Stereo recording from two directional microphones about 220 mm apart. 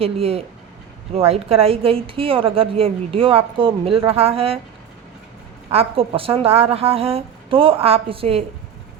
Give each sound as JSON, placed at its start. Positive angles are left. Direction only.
{"t": 0.0, "sound": "a woman's voice", "side_deg": -25}
{"t": 5.7, "sound": "a woman's voice", "side_deg": -25}